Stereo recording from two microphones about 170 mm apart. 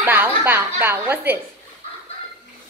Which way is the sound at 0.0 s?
10° right (ahead or behind).